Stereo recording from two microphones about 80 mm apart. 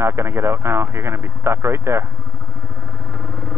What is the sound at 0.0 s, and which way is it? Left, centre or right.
Speech, right.